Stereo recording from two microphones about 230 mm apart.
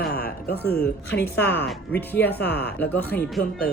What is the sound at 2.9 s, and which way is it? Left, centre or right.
Speech, centre.